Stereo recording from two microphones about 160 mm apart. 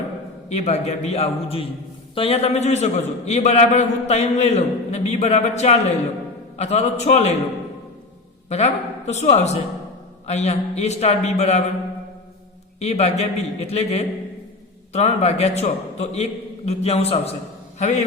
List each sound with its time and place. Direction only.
0.4 s a man's voice: 45° left (ahead or behind)
8.4 s a man's voice: 45° left (ahead or behind)
12.8 s a man's voice: 40° left (ahead or behind)